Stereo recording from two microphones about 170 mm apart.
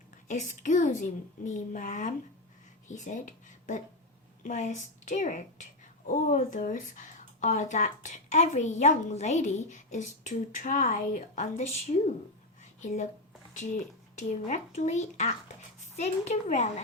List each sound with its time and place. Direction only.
0.3 s speech: 45° left (ahead or behind)
11.9 s speech: 35° left (ahead or behind)
12.8 s speech: 45° left (ahead or behind)
14.2 s speech: 45° left (ahead or behind)